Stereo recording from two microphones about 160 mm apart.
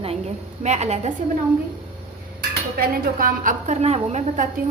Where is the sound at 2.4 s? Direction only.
70° right (ahead or behind); by 4.5 s 50° right (ahead or behind).